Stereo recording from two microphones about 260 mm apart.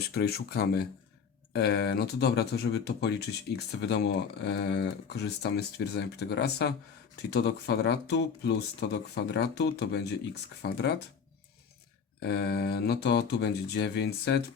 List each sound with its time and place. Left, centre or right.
0.1 s speech: left
12.2 s speech: left